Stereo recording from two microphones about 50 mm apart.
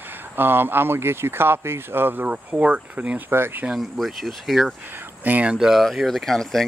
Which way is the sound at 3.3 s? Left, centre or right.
Right.